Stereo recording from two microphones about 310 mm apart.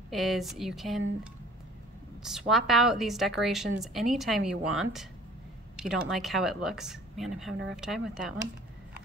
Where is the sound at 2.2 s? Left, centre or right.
Centre.